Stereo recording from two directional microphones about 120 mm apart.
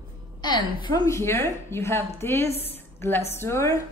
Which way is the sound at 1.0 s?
25° left (ahead or behind).